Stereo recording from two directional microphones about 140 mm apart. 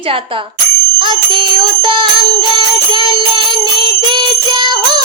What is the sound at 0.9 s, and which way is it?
Music, 35° right (ahead or behind).